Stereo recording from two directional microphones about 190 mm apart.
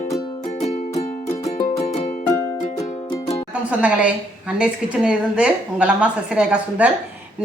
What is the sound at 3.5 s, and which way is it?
A woman's voice, 5° right (ahead or behind).